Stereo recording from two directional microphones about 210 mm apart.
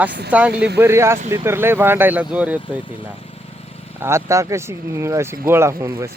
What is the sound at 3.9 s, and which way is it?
Speech, 10° right (ahead or behind).